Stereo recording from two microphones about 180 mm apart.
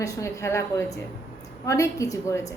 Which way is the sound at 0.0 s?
15° left (ahead or behind).